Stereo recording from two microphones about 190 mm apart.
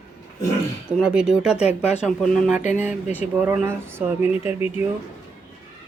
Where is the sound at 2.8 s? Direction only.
10° right (ahead or behind).